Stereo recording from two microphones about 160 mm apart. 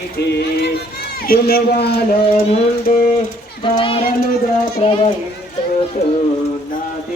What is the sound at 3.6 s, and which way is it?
Speech, 35° left (ahead or behind).